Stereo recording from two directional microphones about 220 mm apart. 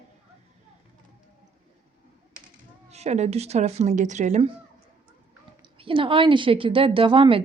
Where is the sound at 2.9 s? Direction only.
30° right (ahead or behind).